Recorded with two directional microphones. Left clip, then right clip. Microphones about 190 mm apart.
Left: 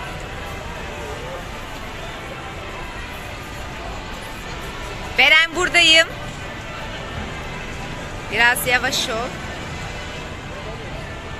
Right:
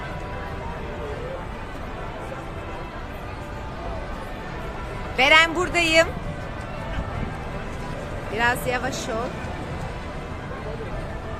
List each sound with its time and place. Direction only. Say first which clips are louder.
5.1 s a man's voice: left 2 dB; 10° right (ahead or behind)
8.4 s speech: left 6 dB; 5° right (ahead or behind)